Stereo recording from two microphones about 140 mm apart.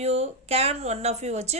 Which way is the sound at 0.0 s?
50° right (ahead or behind).